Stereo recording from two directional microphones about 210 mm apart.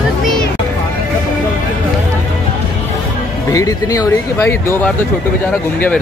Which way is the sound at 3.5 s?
15° left (ahead or behind).